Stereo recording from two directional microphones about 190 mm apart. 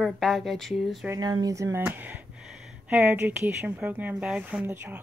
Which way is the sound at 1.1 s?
20° right (ahead or behind).